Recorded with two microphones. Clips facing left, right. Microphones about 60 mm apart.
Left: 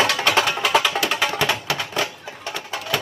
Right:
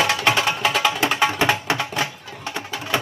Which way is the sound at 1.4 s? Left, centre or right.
Right.